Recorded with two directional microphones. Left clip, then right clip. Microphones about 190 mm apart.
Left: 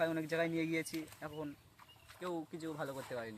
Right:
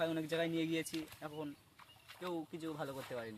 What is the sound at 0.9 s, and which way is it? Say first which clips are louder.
Speech: even; 20° right (ahead or behind).